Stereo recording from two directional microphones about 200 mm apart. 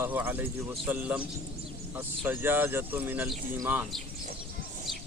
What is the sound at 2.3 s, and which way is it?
Speech, 10° right (ahead or behind).